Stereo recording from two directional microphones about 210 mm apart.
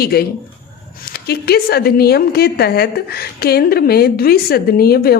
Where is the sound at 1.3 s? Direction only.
50° left (ahead or behind).